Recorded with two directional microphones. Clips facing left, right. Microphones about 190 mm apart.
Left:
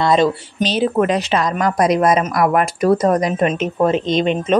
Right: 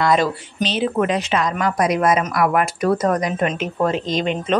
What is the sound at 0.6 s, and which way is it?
A woman's voice, 40° left (ahead or behind).